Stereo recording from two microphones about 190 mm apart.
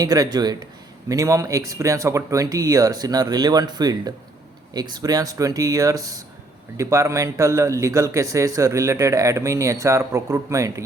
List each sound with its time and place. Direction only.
0.0 s speech: 20° right (ahead or behind)